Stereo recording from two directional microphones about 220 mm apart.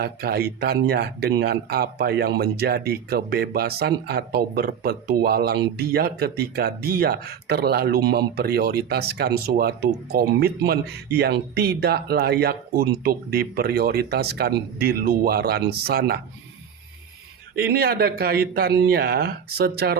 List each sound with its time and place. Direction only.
0.0 s speech: 45° right (ahead or behind)
17.5 s speech: 45° right (ahead or behind)